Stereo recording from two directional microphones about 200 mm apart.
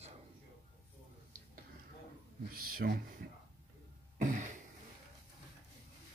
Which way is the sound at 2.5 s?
45° right (ahead or behind).